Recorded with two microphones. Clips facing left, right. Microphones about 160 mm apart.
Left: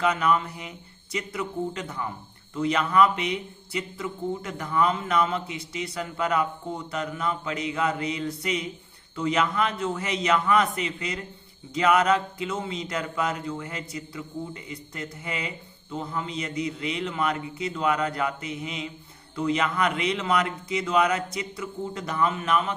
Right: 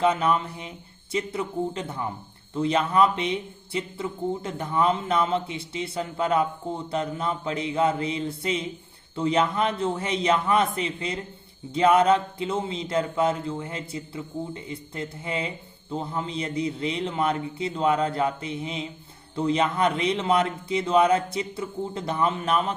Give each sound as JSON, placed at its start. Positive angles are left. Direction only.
{"t": 0.0, "sound": "a man's voice", "side_deg": -25}